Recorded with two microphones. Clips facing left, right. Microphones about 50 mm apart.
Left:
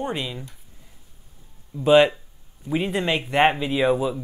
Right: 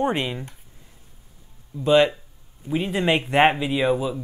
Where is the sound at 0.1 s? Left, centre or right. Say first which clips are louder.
Right 4 dB; right.